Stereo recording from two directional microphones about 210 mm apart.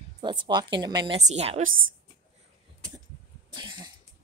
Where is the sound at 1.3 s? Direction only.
30° right (ahead or behind).